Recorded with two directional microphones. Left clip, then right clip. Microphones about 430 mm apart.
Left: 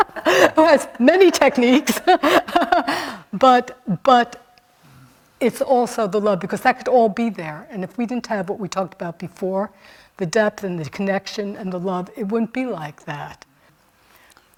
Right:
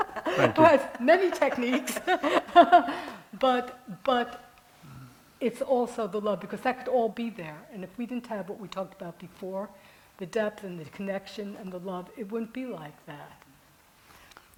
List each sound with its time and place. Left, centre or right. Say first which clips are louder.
0.0 s a sound: left 11 dB; left
1.0 s speech: left 10 dB; left
1.6 s speech: left 12 dB; left
5.4 s a woman's voice: left 9 dB; left